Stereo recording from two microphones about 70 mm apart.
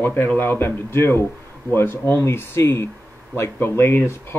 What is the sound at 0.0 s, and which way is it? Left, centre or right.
Speech, left.